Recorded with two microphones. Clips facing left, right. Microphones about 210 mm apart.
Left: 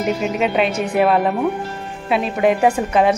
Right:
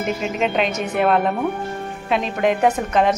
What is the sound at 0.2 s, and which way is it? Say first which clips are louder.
A woman's voice: left 3 dB; 5° left (ahead or behind).